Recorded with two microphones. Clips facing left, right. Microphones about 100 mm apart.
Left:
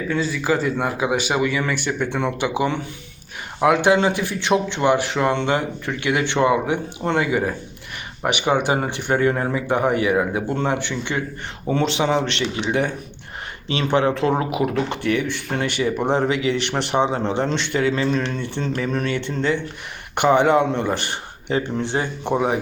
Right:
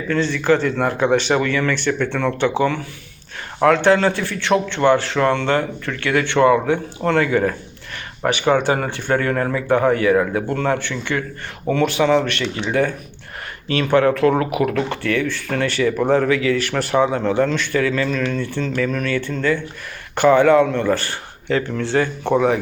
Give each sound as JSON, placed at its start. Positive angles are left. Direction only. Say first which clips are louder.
{"t": 0.1, "sound": "a man's voice", "louder": "right 5 dB", "side_deg": 5}